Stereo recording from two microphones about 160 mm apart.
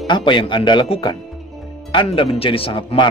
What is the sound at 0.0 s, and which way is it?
Speech, 30° left (ahead or behind).